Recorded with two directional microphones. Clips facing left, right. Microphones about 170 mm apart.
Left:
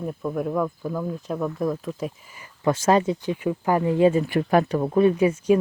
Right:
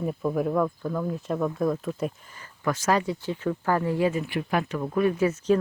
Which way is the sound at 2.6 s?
25° left (ahead or behind).